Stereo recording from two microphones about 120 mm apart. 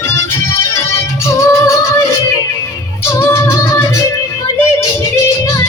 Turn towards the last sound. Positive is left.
turn(degrees=25)  # may be behind; listen again after turning